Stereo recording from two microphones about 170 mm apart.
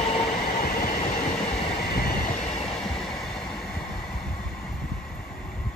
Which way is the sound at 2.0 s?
60° left (ahead or behind).